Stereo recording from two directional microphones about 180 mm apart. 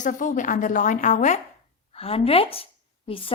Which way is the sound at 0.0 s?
45° left (ahead or behind).